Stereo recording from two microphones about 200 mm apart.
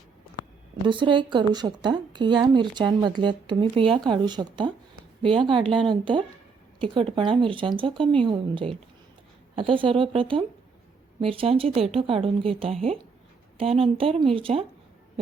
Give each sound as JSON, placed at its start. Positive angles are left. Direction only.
{"t": 0.9, "sound": "speech", "side_deg": -25}